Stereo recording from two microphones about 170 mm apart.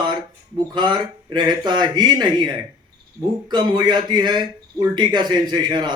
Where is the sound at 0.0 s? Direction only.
25° right (ahead or behind).